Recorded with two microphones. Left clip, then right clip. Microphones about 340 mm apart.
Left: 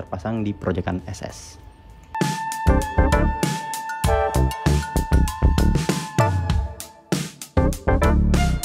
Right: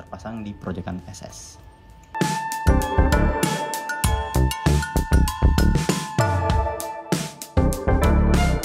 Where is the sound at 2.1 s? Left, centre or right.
Centre.